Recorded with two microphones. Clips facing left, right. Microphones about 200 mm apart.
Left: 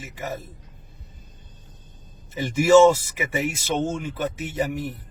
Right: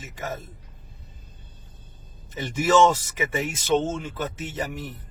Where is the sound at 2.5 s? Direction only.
10° left (ahead or behind).